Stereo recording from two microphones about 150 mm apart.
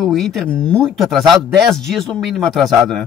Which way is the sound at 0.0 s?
Centre (ahead or behind).